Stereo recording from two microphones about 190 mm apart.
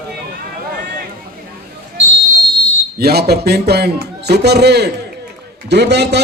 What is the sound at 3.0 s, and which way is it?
A man's voice, 55° right (ahead or behind).